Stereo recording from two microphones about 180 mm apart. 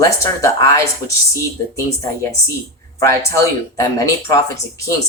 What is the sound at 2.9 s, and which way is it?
Speech, 15° left (ahead or behind).